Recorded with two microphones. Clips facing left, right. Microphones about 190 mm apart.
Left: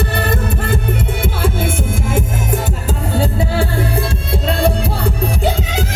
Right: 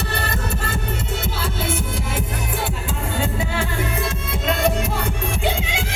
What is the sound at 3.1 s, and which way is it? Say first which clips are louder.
Music: left 7 dB; 35° left (ahead or behind).